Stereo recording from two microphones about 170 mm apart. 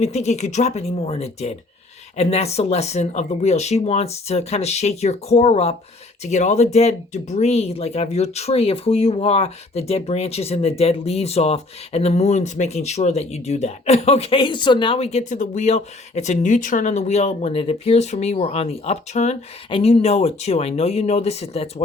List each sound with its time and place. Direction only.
0.0 s speech: 40° left (ahead or behind)